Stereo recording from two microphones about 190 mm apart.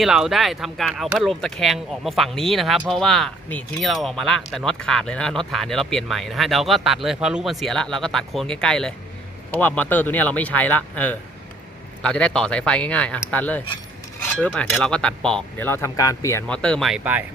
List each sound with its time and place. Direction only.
0.0 s speech: 5° right (ahead or behind); by 16.4 s 15° left (ahead or behind)
16.5 s speech: 5° left (ahead or behind)